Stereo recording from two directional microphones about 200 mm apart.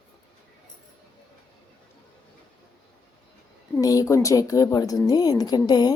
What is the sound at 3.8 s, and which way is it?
A woman's voice, 15° left (ahead or behind).